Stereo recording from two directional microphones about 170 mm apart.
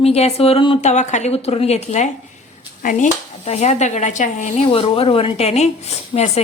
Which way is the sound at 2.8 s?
50° left (ahead or behind).